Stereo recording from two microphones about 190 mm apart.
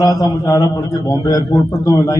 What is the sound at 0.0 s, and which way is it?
A man's voice, 20° left (ahead or behind).